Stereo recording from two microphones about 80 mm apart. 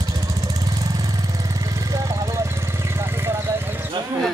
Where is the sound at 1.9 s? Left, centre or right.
Right.